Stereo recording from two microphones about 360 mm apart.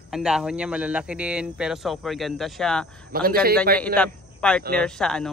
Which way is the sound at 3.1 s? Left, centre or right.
Right.